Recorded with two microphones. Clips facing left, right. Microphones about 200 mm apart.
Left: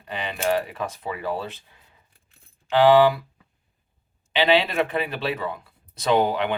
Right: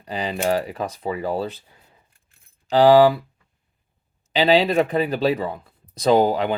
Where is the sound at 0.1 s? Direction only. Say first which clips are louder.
Right 2 dB; 35° right (ahead or behind).